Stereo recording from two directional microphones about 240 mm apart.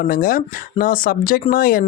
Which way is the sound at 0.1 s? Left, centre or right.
Left.